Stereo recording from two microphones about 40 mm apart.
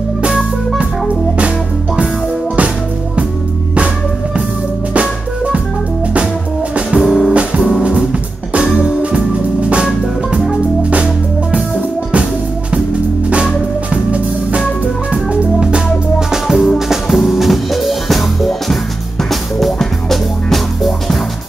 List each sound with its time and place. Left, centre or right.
5.0 s music: right
6.9 s music: centre
7.3 s music: right
8.7 s music: right
13.3 s music: right
15.6 s music: centre